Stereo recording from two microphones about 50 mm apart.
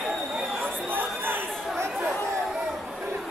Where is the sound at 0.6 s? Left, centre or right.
Right.